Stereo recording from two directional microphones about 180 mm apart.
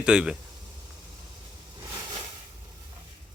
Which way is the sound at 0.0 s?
5° right (ahead or behind).